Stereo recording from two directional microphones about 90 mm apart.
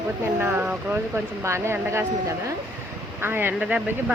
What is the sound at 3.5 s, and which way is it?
Speech, 10° right (ahead or behind).